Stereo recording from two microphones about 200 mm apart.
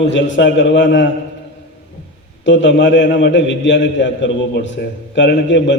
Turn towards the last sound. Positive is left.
turn(degrees=65)  # may be behind; listen again after turning